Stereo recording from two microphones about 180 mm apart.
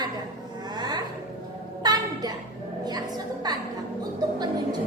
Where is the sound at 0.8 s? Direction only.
25° right (ahead or behind).